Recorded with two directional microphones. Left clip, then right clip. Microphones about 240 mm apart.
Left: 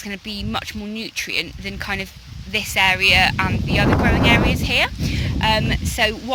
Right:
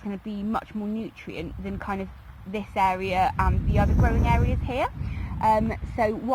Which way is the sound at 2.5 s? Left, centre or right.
Left.